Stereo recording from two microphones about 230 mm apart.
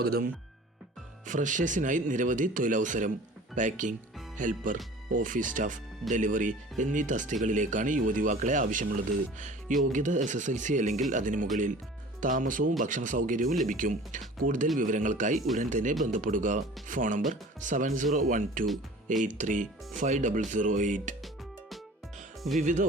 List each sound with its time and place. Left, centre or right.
0.0 s speech: right
1.3 s speech: right
22.5 s speech: right